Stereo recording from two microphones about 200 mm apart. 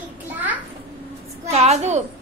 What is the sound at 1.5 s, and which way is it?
Speech, 30° right (ahead or behind).